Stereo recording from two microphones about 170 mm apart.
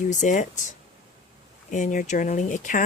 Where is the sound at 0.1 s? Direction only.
45° left (ahead or behind).